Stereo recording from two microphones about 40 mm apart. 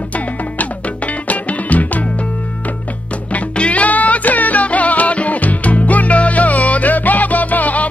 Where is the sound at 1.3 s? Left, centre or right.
Left.